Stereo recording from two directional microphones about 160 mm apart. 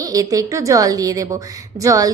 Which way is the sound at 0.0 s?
20° right (ahead or behind).